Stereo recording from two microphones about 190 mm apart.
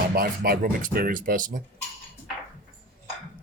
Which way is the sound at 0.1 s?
50° right (ahead or behind).